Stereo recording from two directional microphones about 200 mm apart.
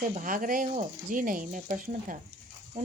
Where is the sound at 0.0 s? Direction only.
40° right (ahead or behind).